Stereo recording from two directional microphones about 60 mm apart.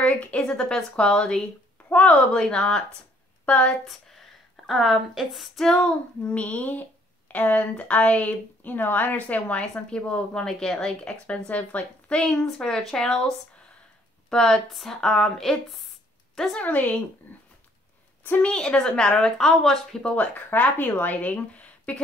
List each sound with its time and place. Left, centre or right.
0.0 s speech: left
2.3 s a woman's voice: centre
3.8 s a woman's voice: centre
5.7 s a woman's voice: centre
14.3 s speech: centre
16.5 s a woman's voice: left
18.4 s speech: centre
20.0 s speech: centre
20.3 s a woman's voice: left